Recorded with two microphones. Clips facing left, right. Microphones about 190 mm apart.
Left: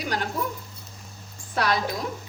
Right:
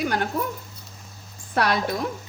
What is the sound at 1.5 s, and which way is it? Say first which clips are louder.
Speech: right 2 dB; 60° right (ahead or behind).